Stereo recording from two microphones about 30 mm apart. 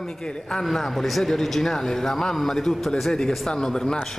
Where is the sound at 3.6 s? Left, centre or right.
Centre.